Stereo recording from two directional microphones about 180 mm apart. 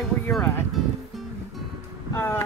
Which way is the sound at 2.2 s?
15° left (ahead or behind).